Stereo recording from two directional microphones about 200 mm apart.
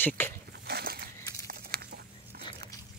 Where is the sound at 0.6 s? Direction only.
50° right (ahead or behind).